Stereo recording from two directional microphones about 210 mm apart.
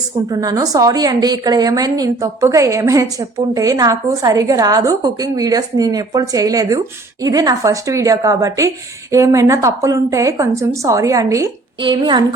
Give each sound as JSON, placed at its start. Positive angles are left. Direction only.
{"t": 0.3, "sound": "a woman's voice", "side_deg": -15}